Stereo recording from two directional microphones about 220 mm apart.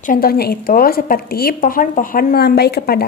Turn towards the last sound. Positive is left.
turn(degrees=45)  # may be behind; listen again after turning